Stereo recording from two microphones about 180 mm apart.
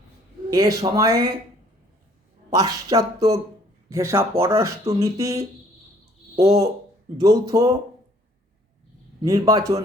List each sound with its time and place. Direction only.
0.5 s speech: 20° right (ahead or behind)
2.5 s speech: 20° right (ahead or behind)
9.2 s speech: 20° right (ahead or behind)